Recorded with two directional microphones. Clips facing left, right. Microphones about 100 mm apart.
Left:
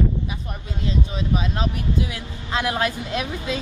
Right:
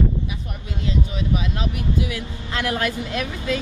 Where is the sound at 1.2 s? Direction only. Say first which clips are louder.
Left 1 dB; 35° left (ahead or behind).